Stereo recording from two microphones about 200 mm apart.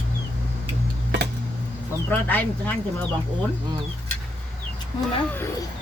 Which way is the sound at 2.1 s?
10° left (ahead or behind).